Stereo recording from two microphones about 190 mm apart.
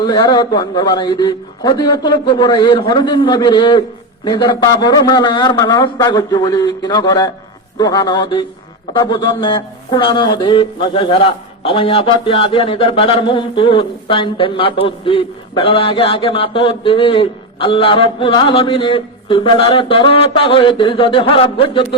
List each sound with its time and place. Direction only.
0.0 s speech: 20° left (ahead or behind)